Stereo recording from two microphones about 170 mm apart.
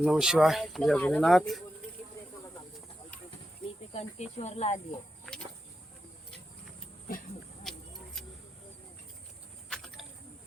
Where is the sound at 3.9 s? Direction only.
40° left (ahead or behind).